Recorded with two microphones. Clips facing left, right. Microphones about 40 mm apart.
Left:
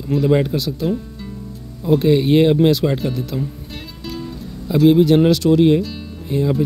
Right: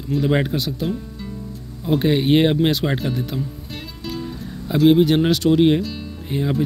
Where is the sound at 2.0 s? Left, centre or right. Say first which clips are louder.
Left 2 dB; right.